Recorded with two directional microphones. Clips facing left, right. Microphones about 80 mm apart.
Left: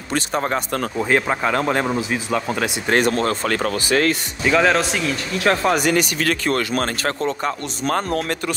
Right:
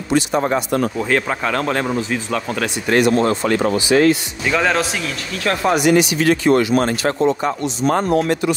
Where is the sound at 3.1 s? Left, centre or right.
Right.